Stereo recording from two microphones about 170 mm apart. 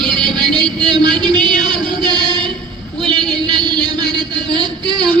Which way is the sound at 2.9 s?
25° right (ahead or behind).